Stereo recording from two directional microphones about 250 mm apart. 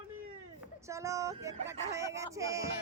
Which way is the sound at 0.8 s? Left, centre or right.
Centre.